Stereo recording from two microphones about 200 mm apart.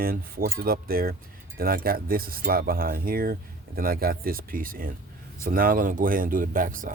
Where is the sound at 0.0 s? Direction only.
45° right (ahead or behind).